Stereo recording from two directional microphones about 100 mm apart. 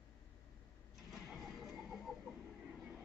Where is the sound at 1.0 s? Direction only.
Centre (ahead or behind).